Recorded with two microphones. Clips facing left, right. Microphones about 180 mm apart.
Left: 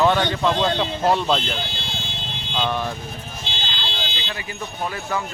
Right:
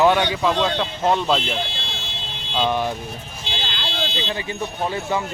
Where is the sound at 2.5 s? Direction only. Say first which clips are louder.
Right 3 dB; 15° right (ahead or behind).